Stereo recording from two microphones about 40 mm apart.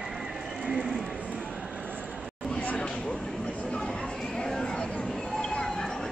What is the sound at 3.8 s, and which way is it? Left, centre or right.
Chatter, centre.